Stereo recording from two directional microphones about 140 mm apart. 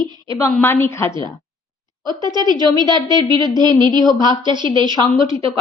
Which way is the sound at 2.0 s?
30° right (ahead or behind).